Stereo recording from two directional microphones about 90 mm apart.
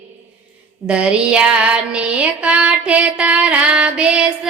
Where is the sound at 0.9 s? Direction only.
10° right (ahead or behind).